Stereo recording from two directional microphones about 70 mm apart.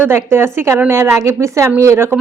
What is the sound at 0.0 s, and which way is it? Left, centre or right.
Speech, right.